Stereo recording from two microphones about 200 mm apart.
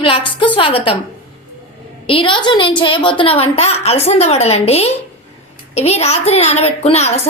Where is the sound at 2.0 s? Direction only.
25° left (ahead or behind).